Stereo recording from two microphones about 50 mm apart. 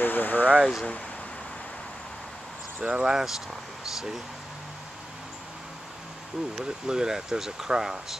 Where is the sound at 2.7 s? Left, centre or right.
Right.